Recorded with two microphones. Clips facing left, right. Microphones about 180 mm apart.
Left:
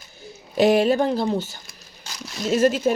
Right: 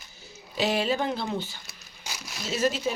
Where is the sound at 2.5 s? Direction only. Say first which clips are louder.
Left 8 dB; 50° left (ahead or behind).